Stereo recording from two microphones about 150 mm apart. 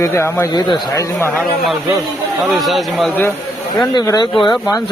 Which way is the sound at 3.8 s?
25° left (ahead or behind).